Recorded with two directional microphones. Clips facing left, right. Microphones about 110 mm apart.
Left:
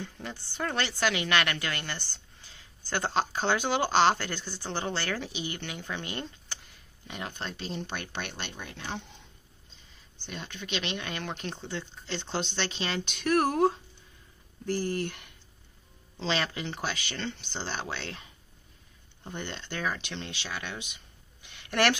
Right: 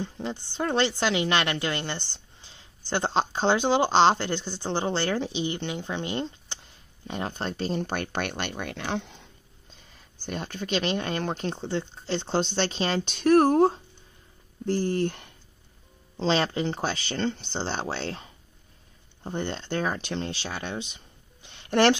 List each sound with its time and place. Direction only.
0.0 s a woman's voice: 25° right (ahead or behind); by 9.2 s 90° right
10.2 s speech: 40° right (ahead or behind)